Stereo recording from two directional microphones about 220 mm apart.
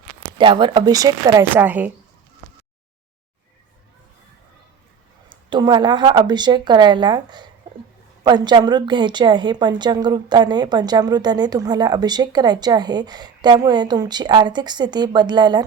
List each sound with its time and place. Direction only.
0.3 s speech: 20° right (ahead or behind)
5.3 s a woman's voice: 20° right (ahead or behind)